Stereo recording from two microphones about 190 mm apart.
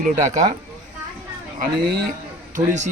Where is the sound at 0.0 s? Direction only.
40° right (ahead or behind).